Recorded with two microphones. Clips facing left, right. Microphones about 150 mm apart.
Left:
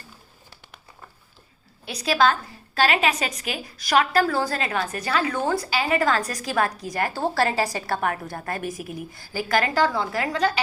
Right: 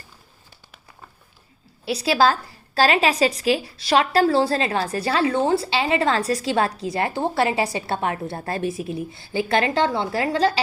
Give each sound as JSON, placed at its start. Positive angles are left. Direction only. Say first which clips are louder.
{"t": 1.8, "sound": "a woman's voice", "louder": "right 2 dB", "side_deg": -30}